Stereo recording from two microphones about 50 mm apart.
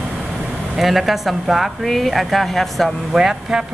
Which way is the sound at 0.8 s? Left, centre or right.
Centre.